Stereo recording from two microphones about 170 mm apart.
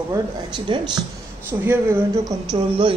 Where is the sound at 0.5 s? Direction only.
25° right (ahead or behind).